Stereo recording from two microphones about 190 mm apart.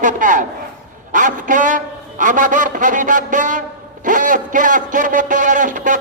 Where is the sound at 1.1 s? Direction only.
45° right (ahead or behind).